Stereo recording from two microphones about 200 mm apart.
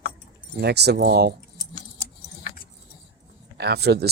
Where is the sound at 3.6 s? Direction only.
55° right (ahead or behind).